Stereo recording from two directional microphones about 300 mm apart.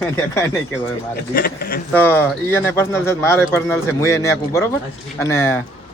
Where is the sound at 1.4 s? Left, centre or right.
Left.